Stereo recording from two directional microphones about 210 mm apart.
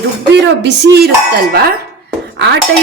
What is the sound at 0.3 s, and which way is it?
Speech, 55° right (ahead or behind).